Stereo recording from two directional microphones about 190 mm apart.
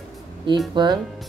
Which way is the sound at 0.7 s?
25° right (ahead or behind).